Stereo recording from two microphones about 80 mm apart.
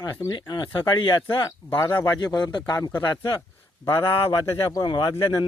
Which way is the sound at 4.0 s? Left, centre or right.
Left.